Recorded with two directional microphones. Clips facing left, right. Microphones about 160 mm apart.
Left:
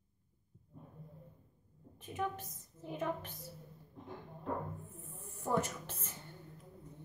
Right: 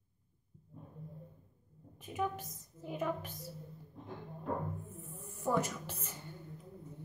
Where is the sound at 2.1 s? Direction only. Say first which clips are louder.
Right 2 dB; 10° right (ahead or behind).